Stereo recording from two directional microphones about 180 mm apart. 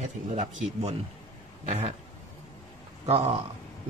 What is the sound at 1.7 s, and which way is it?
Speech, 35° right (ahead or behind).